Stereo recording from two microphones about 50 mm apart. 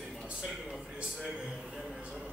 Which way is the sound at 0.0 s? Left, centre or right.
Centre.